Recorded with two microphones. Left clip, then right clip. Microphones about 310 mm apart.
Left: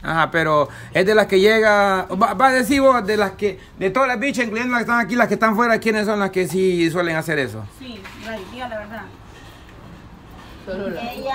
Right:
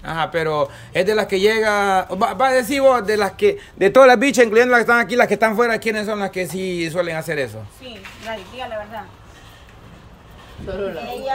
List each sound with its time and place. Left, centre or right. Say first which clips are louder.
0.0 s speech: left 3 dB; centre